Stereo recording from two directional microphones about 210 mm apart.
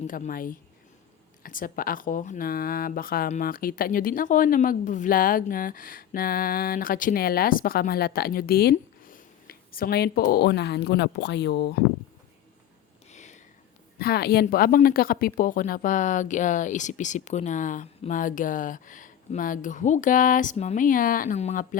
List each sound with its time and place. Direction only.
0.1 s speech: 40° left (ahead or behind)
13.1 s a sound: 35° left (ahead or behind)
14.0 s speech: 45° left (ahead or behind)